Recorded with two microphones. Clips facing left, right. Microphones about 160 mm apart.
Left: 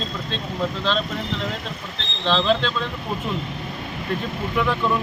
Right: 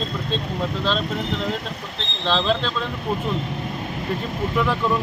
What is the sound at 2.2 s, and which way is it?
Speech, centre (ahead or behind).